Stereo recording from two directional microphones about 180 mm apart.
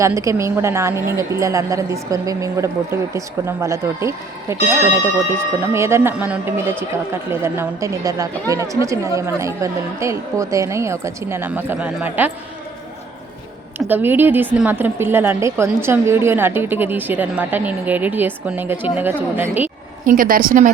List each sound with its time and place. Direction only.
0.0 s a woman's voice: 15° right (ahead or behind)
13.7 s a woman's voice: 10° right (ahead or behind)
20.1 s a woman's voice: 50° right (ahead or behind)